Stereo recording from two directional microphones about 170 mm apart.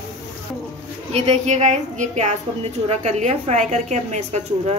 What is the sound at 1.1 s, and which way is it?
A woman's voice, 40° right (ahead or behind).